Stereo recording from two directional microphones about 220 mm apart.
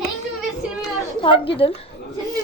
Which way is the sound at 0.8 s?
25° left (ahead or behind).